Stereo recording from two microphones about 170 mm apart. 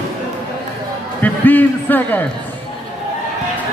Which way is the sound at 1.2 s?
10° left (ahead or behind).